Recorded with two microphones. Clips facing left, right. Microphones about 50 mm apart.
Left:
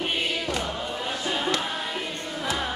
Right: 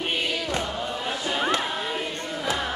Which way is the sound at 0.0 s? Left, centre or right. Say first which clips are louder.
Even; centre.